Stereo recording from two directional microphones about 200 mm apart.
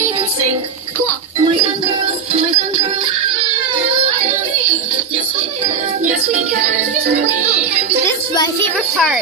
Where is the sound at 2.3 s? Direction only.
35° right (ahead or behind).